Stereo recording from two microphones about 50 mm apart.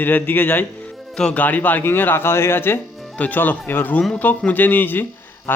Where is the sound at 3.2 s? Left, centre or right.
Left.